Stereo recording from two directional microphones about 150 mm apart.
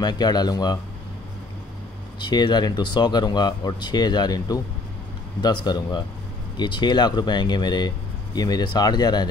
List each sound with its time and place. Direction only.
0.0 s speech: 25° left (ahead or behind)
2.1 s speech: 30° left (ahead or behind)